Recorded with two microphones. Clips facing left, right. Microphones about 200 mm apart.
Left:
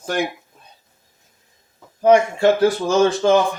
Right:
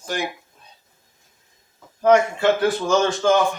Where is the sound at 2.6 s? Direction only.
35° left (ahead or behind).